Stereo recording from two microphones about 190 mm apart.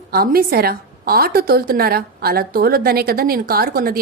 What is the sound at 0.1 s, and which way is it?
A woman's voice, 50° right (ahead or behind).